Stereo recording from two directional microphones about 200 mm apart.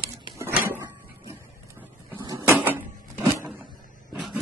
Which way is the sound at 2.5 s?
10° right (ahead or behind).